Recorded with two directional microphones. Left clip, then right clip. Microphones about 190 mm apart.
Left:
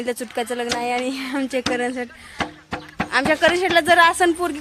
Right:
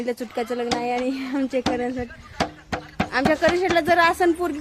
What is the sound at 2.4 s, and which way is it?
Music, 55° right (ahead or behind).